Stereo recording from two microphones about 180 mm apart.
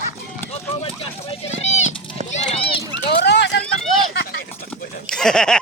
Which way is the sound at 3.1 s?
70° left (ahead or behind).